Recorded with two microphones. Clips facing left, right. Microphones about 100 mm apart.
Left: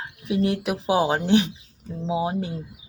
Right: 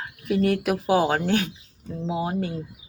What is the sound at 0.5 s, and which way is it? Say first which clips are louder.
Speech: right 1 dB; 15° left (ahead or behind).